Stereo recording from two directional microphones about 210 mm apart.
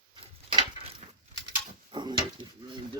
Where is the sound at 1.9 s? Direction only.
20° right (ahead or behind).